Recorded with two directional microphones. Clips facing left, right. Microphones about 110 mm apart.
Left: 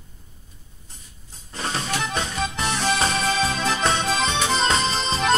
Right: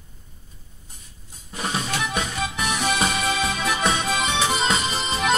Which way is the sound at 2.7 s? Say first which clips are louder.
Even; 15° right (ahead or behind).